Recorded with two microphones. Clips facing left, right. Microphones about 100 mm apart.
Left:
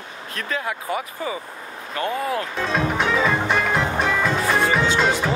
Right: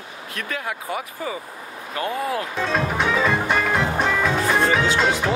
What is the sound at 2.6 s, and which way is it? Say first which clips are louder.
Music: even; centre (ahead or behind).